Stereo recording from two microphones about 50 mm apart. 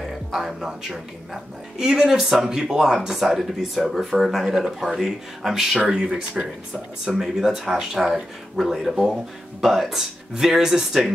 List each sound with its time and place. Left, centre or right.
0.3 s a woman's voice: centre
4.5 s a woman's voice: centre
4.7 s a woman's voice: centre